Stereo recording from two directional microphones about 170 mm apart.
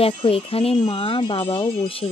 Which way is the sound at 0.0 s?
35° left (ahead or behind).